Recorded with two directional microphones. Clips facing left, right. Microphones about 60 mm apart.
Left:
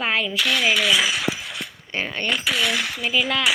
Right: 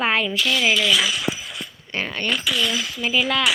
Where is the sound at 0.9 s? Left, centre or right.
Left.